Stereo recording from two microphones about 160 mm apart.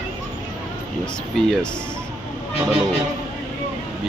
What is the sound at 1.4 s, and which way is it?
Speech, 5° left (ahead or behind).